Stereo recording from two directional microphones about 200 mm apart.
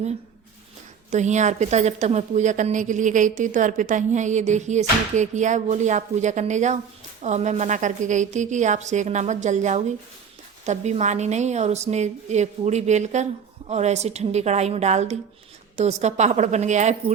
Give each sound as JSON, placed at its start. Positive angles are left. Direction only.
{"t": 1.1, "sound": "a woman's voice", "side_deg": -35}